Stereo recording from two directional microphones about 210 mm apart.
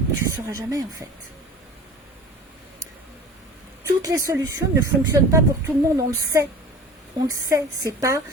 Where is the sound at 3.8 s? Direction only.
15° right (ahead or behind).